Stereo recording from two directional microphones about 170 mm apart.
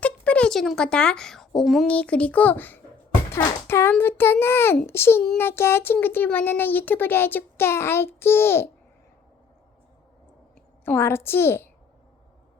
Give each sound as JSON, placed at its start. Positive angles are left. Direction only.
{"t": 0.0, "sound": "speech", "side_deg": 5}
{"t": 10.8, "sound": "speech", "side_deg": 15}